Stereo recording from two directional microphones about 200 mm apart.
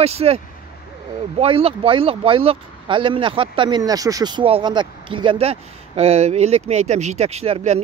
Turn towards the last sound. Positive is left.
turn(degrees=-30)  # may be behind; listen again after turning